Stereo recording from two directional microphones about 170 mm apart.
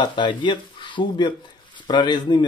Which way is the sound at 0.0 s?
25° left (ahead or behind).